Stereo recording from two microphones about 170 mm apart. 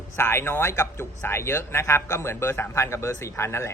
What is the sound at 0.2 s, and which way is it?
A man's voice, 15° left (ahead or behind).